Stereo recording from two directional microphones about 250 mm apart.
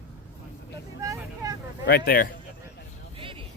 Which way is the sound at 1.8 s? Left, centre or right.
Left.